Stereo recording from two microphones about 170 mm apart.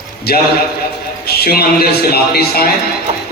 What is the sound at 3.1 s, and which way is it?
Music, 35° right (ahead or behind).